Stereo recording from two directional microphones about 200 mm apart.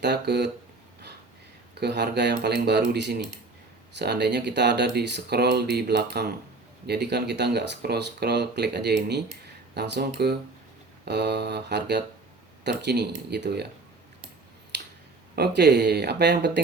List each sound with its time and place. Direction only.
0.0 s speech: 55° right (ahead or behind)
1.8 s speech: 55° right (ahead or behind)
14.7 s finger snapping: 60° right (ahead or behind)
15.4 s speech: 55° right (ahead or behind)